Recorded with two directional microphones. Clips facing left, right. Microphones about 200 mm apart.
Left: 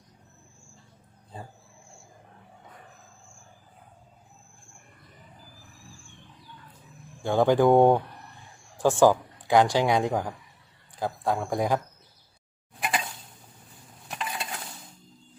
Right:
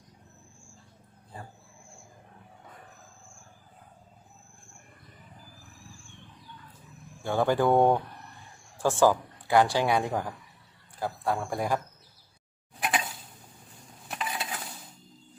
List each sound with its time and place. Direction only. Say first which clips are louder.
7.3 s a woman's voice: left 4 dB; 15° left (ahead or behind)
12.7 s a sound: even; centre (ahead or behind)
14.0 s cutlery: even; centre (ahead or behind)